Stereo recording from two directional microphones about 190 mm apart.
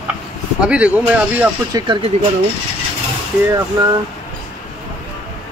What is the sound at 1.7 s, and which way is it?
Speech, 25° right (ahead or behind).